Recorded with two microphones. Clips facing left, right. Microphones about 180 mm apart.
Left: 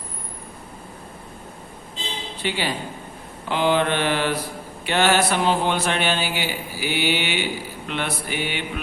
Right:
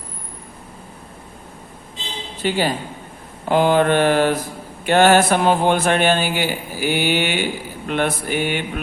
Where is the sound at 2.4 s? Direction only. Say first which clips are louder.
Right 6 dB; 45° right (ahead or behind).